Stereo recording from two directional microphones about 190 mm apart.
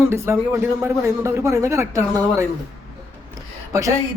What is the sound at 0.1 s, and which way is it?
Speech, 15° right (ahead or behind).